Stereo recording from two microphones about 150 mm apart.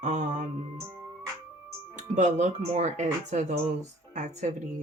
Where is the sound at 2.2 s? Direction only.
55° right (ahead or behind).